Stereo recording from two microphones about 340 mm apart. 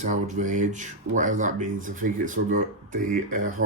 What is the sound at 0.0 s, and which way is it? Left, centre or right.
Speech, right.